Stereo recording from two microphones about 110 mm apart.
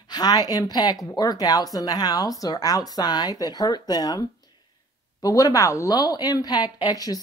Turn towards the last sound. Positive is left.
turn(degrees=35)  # may be behind; listen again after turning